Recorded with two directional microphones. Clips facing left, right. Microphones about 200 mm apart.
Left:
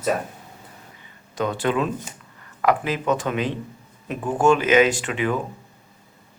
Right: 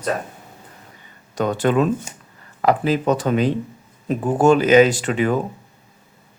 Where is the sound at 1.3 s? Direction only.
45° right (ahead or behind).